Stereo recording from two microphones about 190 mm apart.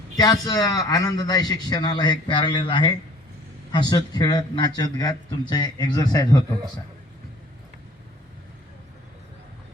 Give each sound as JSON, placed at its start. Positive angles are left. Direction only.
{"t": 0.2, "sound": "a man's voice", "side_deg": 20}